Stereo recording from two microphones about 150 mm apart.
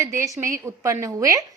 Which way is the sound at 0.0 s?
20° right (ahead or behind).